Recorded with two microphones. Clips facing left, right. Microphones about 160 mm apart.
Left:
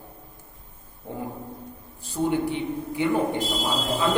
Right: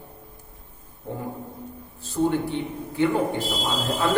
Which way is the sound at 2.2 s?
15° left (ahead or behind).